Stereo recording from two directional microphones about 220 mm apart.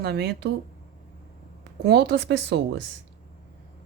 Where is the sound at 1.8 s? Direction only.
45° right (ahead or behind).